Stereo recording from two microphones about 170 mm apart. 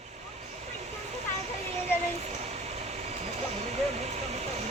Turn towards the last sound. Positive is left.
turn(degrees=-40)  # may be behind; listen again after turning